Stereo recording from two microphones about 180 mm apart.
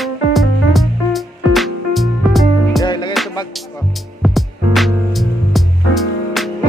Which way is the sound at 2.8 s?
20° left (ahead or behind).